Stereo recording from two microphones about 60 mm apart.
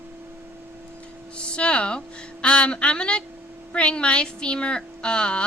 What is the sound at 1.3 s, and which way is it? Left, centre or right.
Speech, centre.